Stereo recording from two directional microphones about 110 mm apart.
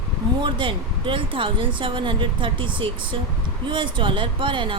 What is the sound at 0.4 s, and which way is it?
Speech, 50° right (ahead or behind).